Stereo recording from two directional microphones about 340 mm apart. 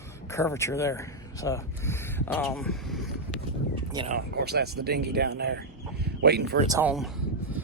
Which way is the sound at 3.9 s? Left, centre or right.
Centre.